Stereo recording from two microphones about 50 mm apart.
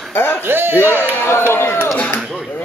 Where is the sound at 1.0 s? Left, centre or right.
Left.